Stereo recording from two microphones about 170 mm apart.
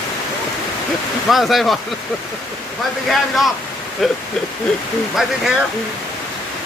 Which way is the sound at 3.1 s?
Centre (ahead or behind).